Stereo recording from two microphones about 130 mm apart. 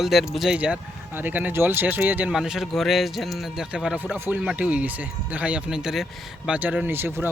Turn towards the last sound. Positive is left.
turn(degrees=-15)  # may be behind; listen again after turning